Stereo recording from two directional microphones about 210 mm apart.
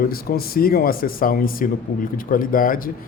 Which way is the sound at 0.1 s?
45° left (ahead or behind).